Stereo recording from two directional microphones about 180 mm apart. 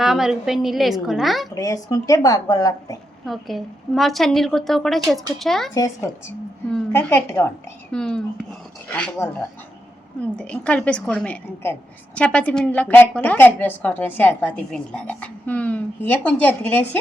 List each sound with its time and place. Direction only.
0.0 s a woman's voice: centre (ahead or behind)
1.5 s speech: 20° left (ahead or behind)
3.2 s a woman's voice: centre (ahead or behind)
5.7 s a woman's voice: 15° left (ahead or behind)